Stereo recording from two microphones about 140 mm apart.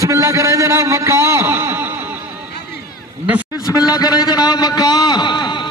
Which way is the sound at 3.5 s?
25° left (ahead or behind).